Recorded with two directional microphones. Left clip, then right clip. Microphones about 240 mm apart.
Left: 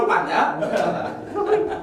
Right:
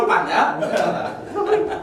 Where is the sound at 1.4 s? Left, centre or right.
Centre.